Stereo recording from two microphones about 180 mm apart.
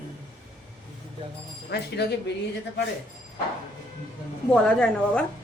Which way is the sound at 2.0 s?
65° left (ahead or behind).